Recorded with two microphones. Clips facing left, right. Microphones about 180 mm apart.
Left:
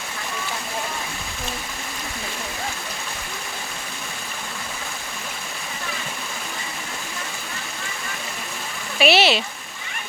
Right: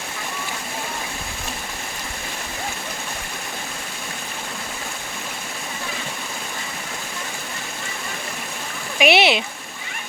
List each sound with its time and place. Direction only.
9.0 s speech: 15° right (ahead or behind)